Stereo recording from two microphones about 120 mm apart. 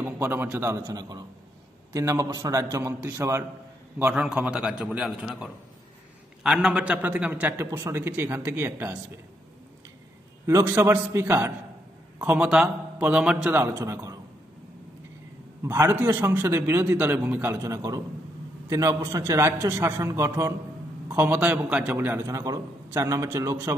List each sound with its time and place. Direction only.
0.0 s a man's voice: 20° right (ahead or behind)
4.1 s a man's voice: 10° right (ahead or behind)
10.4 s a man's voice: 20° right (ahead or behind)
12.2 s a man's voice: 10° right (ahead or behind)
13.6 s a man's voice: 20° right (ahead or behind)
15.6 s a man's voice: 20° right (ahead or behind)
21.1 s a man's voice: 15° right (ahead or behind)
21.9 s a man's voice: 20° right (ahead or behind)